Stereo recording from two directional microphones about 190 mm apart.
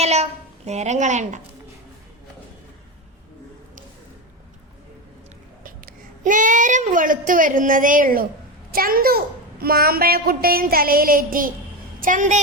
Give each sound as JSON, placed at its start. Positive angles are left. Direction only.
{"t": 0.0, "sound": "a child's voice", "side_deg": -35}
{"t": 5.6, "sound": "a child's voice", "side_deg": -45}